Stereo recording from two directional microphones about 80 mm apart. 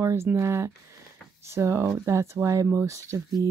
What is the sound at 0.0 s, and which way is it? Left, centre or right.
Speech, right.